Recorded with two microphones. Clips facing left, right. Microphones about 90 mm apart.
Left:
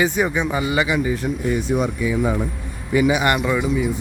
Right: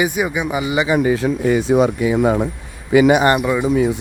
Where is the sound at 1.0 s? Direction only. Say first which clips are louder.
Right 6 dB; 85° right.